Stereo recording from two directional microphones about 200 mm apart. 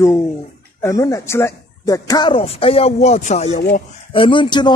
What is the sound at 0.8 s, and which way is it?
Speech, 15° left (ahead or behind).